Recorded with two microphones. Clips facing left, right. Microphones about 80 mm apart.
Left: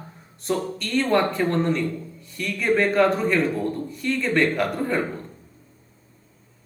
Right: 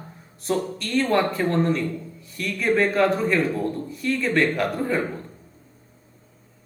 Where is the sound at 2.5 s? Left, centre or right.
Centre.